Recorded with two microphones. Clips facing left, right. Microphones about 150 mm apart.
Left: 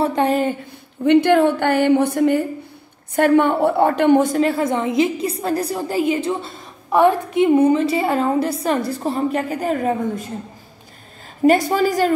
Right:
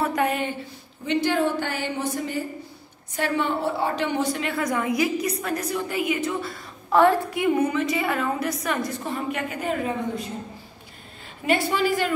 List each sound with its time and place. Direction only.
0.0 s speech: 30° left (ahead or behind)
0.5 s speech: 55° left (ahead or behind)
4.4 s a woman's voice: 30° left (ahead or behind)
11.4 s a woman's voice: 40° left (ahead or behind)